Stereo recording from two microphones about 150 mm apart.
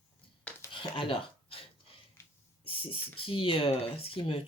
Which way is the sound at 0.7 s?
35° left (ahead or behind).